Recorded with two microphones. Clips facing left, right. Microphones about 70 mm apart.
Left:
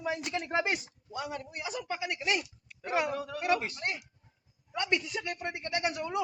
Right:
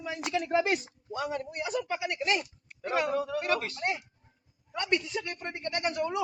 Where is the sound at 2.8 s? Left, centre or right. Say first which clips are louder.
Right 1 dB; centre.